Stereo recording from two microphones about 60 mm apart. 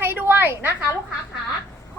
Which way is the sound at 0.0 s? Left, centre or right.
Right.